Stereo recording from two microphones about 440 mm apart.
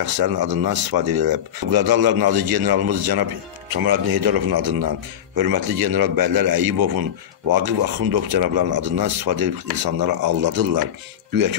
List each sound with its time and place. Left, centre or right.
0.0 s speech: right